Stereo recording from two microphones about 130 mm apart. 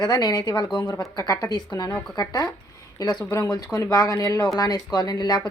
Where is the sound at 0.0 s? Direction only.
30° left (ahead or behind).